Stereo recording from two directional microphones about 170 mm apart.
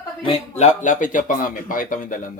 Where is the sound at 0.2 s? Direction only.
35° left (ahead or behind); by 2.1 s 55° left (ahead or behind).